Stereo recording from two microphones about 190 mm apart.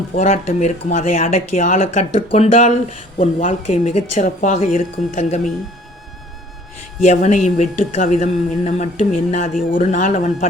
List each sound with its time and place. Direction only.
0.2 s speech: 35° left (ahead or behind)
7.0 s speech: 40° left (ahead or behind)